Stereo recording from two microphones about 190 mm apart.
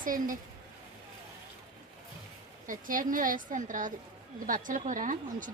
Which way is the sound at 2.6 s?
45° right (ahead or behind).